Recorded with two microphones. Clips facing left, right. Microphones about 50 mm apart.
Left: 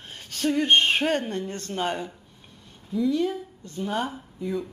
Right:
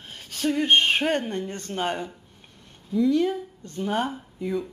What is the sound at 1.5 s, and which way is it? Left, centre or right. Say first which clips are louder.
Speech: even; centre.